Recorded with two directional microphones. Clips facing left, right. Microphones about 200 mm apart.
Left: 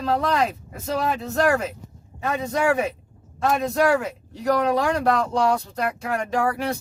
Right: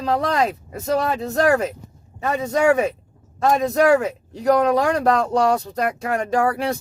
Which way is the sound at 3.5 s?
40° right (ahead or behind).